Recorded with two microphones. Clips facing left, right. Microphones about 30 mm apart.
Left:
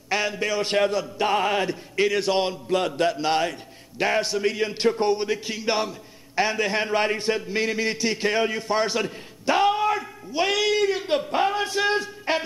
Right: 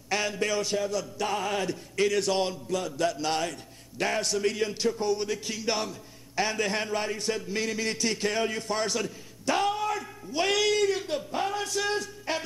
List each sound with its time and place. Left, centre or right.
0.1 s a sound: centre
0.9 s a man's voice: left
2.7 s mantra: left
3.1 s a man's voice: left
4.7 s a sound: left
5.1 s a man's voice: left
6.9 s a man's voice: left
10.3 s speech: centre
11.1 s a sound: left
11.3 s a man's voice: left